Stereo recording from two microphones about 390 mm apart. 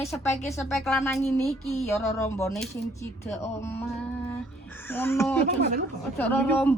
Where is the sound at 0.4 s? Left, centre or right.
Centre.